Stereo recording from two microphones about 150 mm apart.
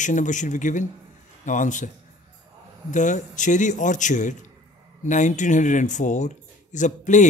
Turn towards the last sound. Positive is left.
turn(degrees=55)  # may be behind; listen again after turning